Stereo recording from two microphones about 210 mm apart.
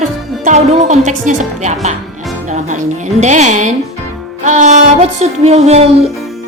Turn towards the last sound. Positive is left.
turn(degrees=-30)  # may be behind; listen again after turning